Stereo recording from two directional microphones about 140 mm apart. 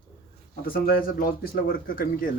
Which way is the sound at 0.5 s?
90° left.